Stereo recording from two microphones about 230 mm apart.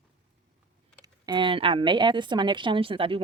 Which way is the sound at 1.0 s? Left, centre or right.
Centre.